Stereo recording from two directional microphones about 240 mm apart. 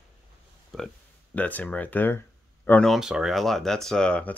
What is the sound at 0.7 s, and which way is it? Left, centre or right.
Speech, centre.